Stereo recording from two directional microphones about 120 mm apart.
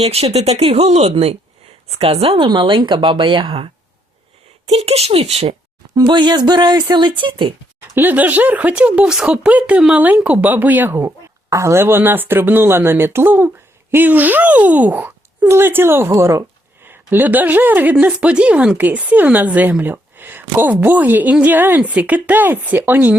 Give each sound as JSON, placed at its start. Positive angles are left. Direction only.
{"t": 0.0, "sound": "speech", "side_deg": -60}
{"t": 4.6, "sound": "speech", "side_deg": -60}
{"t": 5.9, "sound": "a sound", "side_deg": -35}
{"t": 6.9, "sound": "speech", "side_deg": -40}
{"t": 7.9, "sound": "speech", "side_deg": -15}